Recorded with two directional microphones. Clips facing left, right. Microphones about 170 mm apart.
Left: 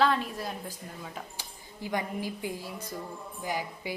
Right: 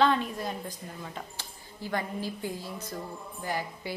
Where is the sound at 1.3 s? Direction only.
15° left (ahead or behind).